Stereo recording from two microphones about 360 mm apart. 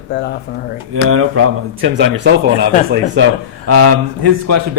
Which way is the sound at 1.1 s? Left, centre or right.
Right.